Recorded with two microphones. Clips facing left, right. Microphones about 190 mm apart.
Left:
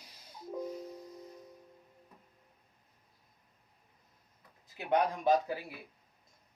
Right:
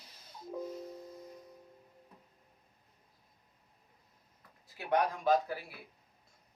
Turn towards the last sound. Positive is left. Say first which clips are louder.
# left 1 dB
turn(degrees=20)  # may be behind; listen again after turning